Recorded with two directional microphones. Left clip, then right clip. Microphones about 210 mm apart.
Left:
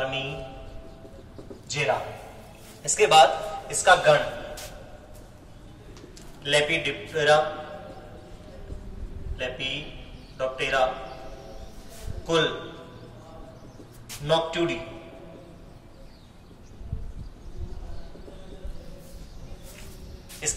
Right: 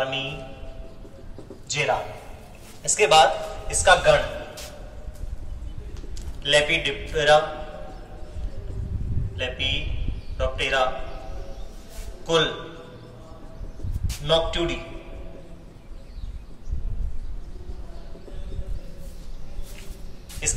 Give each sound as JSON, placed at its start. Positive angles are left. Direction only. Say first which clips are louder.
{"t": 0.0, "sound": "a man's voice", "louder": "right 2 dB", "side_deg": 5}
{"t": 1.7, "sound": "a man's voice", "louder": "right 2 dB", "side_deg": 5}
{"t": 2.8, "sound": "speech", "louder": "even", "side_deg": 15}
{"t": 6.4, "sound": "speech", "louder": "right 3 dB", "side_deg": 10}
{"t": 9.4, "sound": "speech", "louder": "right 4 dB", "side_deg": 10}
{"t": 12.3, "sound": "speech", "louder": "right 2 dB", "side_deg": 5}
{"t": 14.0, "sound": "a man's voice", "louder": "right 2 dB", "side_deg": 5}
{"t": 20.4, "sound": "speech", "louder": "right 3 dB", "side_deg": 20}